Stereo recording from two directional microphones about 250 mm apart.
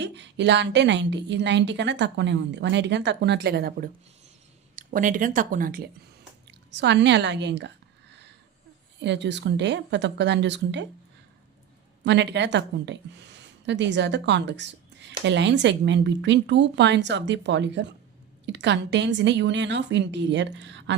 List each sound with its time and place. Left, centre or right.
0.0 s a woman's voice: right
9.0 s a woman's voice: right
12.0 s a woman's voice: right